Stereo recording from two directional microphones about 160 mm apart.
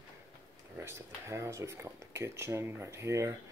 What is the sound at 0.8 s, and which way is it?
Speech, 15° right (ahead or behind).